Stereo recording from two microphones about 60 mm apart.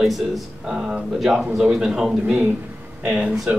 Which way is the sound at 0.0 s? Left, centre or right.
Centre.